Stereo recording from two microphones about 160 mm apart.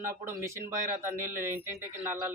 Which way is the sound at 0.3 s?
15° right (ahead or behind).